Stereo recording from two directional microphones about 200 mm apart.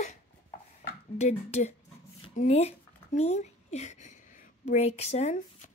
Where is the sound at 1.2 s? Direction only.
35° left (ahead or behind).